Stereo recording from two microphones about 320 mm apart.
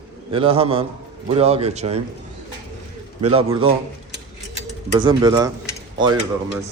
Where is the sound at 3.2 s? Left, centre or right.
Centre.